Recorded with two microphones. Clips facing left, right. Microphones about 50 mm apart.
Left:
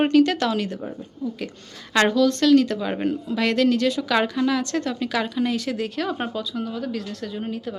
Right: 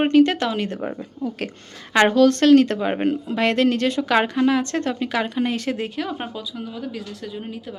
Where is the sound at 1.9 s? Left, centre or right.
Right.